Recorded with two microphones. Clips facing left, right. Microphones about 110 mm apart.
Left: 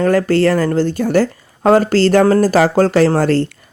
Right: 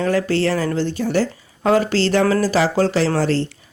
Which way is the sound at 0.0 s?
45° left (ahead or behind).